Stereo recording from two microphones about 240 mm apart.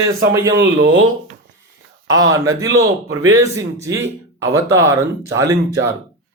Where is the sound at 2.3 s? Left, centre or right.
Centre.